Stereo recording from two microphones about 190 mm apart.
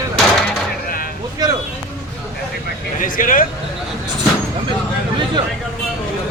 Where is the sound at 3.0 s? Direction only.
45° left (ahead or behind).